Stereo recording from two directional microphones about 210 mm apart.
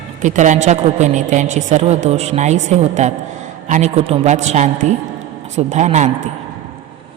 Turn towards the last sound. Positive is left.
turn(degrees=-35)  # may be behind; listen again after turning